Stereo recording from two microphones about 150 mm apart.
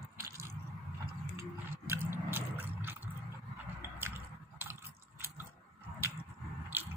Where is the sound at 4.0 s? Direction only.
15° right (ahead or behind).